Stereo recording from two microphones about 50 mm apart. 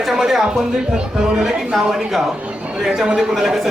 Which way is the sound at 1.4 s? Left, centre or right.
Centre.